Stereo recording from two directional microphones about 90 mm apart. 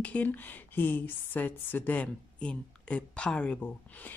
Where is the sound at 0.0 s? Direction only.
15° left (ahead or behind).